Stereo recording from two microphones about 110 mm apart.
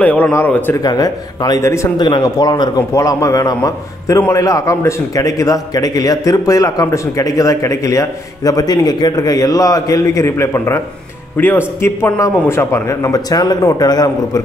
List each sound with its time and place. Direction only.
0.0 s a man's voice: 15° left (ahead or behind)
0.8 s a man's voice: 35° left (ahead or behind)
2.0 s a man's voice: 40° left (ahead or behind)